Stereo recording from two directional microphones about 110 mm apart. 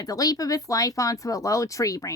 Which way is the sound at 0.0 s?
35° left (ahead or behind).